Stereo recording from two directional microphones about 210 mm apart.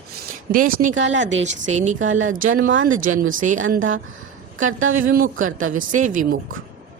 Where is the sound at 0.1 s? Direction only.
40° right (ahead or behind).